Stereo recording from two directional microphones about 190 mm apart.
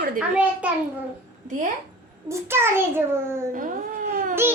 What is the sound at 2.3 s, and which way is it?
A child's voice, 15° right (ahead or behind).